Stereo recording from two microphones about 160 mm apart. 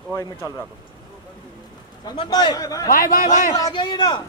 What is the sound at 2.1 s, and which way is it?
Speech, 25° left (ahead or behind).